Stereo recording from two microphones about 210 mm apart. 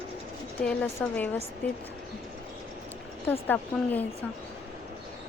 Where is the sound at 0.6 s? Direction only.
5° left (ahead or behind).